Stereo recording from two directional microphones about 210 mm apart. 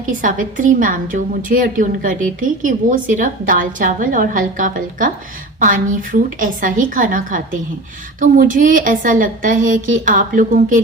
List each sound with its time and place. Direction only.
0.0 s a woman's voice: 40° right (ahead or behind)